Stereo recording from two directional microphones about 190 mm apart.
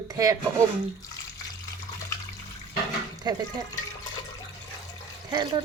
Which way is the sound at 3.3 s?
20° right (ahead or behind).